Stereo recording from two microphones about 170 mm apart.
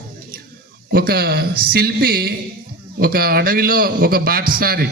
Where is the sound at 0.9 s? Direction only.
65° right (ahead or behind).